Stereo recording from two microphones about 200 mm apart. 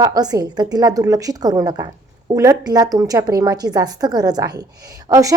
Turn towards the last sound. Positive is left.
turn(degrees=-15)  # may be behind; listen again after turning